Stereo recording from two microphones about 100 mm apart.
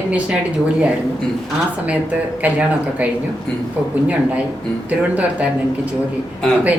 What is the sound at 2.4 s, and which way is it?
Speech, 15° right (ahead or behind).